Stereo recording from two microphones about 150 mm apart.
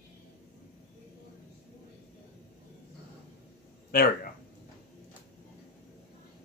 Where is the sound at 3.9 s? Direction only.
75° left (ahead or behind).